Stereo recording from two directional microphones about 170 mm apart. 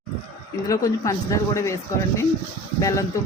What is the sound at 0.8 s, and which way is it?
Speech, 20° left (ahead or behind).